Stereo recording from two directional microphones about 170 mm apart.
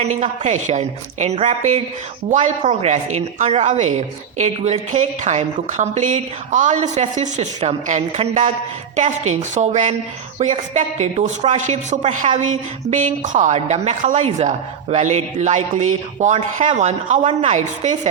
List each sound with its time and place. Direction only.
0.0 s a woman's voice: 40° right (ahead or behind)